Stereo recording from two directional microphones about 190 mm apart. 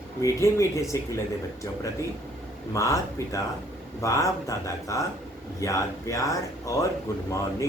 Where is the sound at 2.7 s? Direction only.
15° left (ahead or behind).